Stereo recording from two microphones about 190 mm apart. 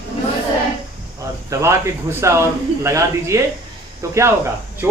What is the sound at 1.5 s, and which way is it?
Speech, 15° right (ahead or behind).